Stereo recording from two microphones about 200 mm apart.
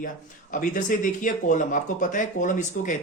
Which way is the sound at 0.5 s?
40° left (ahead or behind).